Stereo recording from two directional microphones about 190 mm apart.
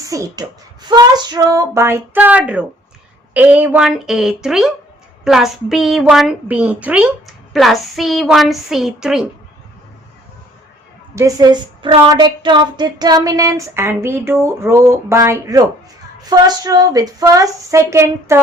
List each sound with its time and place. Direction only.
0.1 s a woman's voice: 20° right (ahead or behind); by 9.2 s 5° right (ahead or behind)
11.1 s a woman's voice: 15° right (ahead or behind)